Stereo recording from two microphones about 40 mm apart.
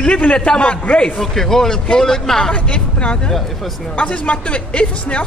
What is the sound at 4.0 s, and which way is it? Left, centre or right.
A woman's voice, left.